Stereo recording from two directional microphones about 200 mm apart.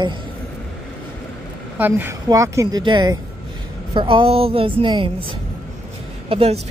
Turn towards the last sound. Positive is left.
turn(degrees=-30)  # may be behind; listen again after turning